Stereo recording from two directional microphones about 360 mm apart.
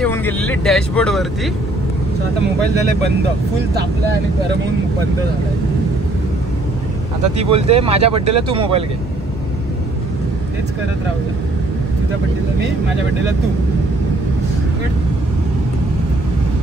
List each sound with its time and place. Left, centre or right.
0.0 s speech: centre
7.3 s speech: centre